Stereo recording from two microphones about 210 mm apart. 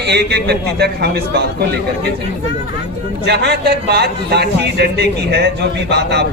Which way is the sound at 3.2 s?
50° right (ahead or behind).